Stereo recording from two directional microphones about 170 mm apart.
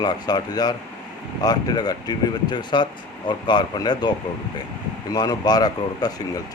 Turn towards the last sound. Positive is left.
turn(degrees=25)  # may be behind; listen again after turning